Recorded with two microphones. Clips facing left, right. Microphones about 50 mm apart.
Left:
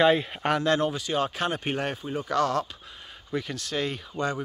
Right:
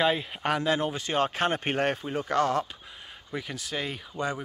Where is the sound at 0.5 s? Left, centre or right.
Centre.